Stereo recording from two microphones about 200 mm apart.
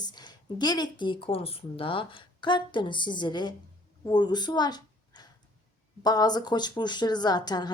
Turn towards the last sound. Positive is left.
turn(degrees=20)  # may be behind; listen again after turning